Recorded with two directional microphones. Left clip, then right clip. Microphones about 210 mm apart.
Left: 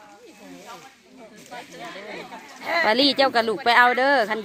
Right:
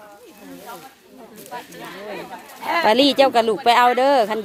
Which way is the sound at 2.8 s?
15° right (ahead or behind).